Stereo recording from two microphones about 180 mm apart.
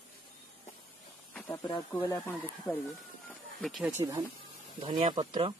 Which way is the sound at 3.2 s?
Centre (ahead or behind).